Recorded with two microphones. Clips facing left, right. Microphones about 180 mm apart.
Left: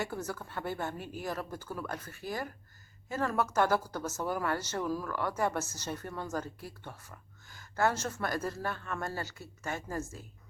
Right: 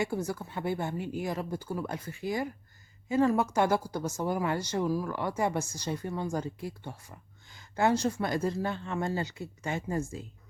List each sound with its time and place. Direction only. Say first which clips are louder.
0.0 s speech: right 5 dB; 10° right (ahead or behind)